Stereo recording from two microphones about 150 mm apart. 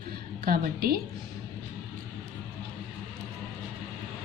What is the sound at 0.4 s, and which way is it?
Speech, 85° right.